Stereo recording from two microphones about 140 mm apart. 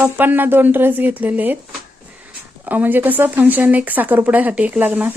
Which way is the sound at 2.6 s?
15° right (ahead or behind).